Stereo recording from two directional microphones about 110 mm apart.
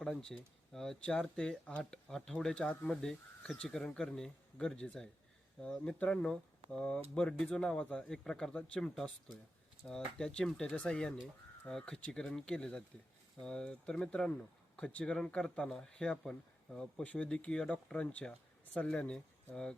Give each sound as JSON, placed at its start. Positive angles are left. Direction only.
{"t": 0.0, "sound": "speech", "side_deg": 5}